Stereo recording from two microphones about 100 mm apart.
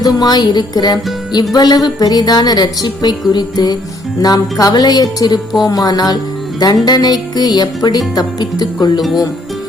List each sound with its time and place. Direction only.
0.0 s music: 45° left (ahead or behind)
4.2 s speech: 40° left (ahead or behind)
6.6 s music: 45° left (ahead or behind)